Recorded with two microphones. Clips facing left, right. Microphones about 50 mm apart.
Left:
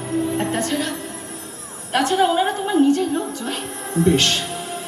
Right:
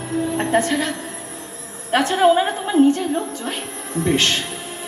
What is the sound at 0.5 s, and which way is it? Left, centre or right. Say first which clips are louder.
A man's voice: right 4 dB; right.